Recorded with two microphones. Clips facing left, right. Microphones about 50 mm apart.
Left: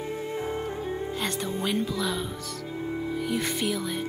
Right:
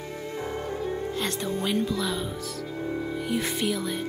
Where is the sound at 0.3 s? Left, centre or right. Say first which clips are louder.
Right 2 dB; left.